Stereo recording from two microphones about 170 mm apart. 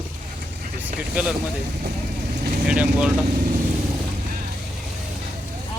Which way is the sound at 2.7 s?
5° right (ahead or behind).